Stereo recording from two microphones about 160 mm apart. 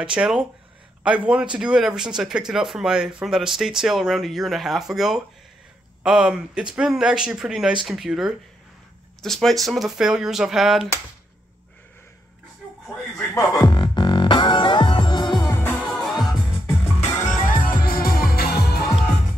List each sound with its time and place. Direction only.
0.0 s speech: 5° right (ahead or behind)
13.3 s music: 20° left (ahead or behind)
15.4 s music: 15° left (ahead or behind)
17.5 s music: 65° left (ahead or behind); by 18.9 s 80° left